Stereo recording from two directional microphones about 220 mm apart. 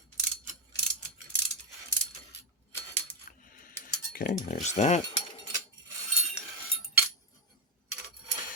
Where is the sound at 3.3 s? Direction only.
35° left (ahead or behind).